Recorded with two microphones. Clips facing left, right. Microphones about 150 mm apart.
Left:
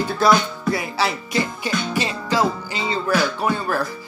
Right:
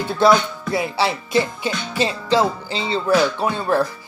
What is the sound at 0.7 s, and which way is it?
Music, 25° right (ahead or behind).